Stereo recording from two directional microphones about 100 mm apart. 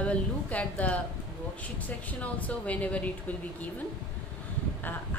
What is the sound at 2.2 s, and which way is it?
Speech, 15° left (ahead or behind).